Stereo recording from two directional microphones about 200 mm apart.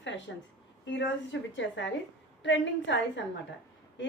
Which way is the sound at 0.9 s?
60° left (ahead or behind).